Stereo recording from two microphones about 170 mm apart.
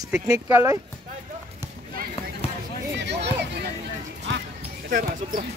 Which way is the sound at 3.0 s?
90° right.